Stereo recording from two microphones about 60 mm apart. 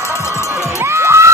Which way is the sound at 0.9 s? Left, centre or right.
Right.